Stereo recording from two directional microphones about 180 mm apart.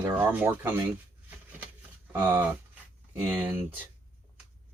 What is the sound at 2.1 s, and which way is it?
Speech, 15° right (ahead or behind).